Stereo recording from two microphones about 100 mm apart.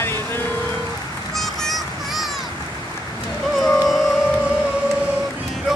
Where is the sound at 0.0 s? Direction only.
25° left (ahead or behind).